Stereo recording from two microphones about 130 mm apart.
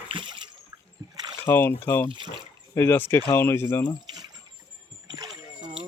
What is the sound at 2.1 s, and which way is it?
Speech, 35° right (ahead or behind).